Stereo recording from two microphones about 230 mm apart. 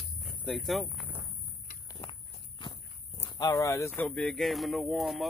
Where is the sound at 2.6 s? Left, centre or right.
Left.